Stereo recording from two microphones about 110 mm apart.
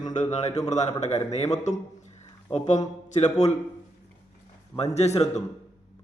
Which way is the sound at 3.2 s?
90° left.